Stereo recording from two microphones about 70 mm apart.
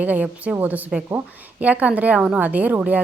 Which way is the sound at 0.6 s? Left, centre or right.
Right.